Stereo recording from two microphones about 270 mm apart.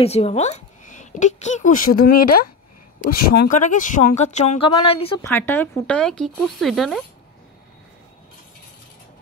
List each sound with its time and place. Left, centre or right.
0.0 s a woman's voice: left
5.2 s speech: centre